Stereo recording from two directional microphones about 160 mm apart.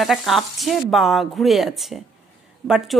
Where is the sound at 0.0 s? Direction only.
Centre (ahead or behind).